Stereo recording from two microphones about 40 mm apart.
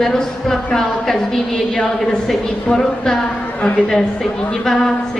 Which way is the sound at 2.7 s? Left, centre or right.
Centre.